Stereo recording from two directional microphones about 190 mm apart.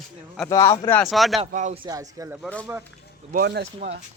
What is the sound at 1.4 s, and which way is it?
Speech, 35° right (ahead or behind).